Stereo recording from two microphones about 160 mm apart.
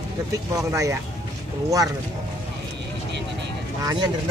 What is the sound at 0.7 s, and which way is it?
Speech, 20° right (ahead or behind).